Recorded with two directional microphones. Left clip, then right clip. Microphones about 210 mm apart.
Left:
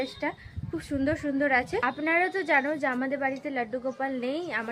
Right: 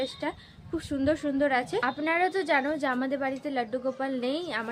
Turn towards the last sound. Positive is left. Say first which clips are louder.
# even
turn(degrees=0)  # may be behind; listen again after turning